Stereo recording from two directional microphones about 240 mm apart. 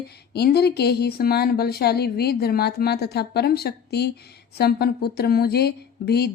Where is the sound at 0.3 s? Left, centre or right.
Left.